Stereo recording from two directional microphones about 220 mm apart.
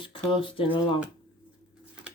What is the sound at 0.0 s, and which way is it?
Speech, 25° left (ahead or behind).